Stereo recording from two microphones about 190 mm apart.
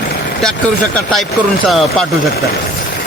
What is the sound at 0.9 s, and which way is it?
Speech, centre (ahead or behind).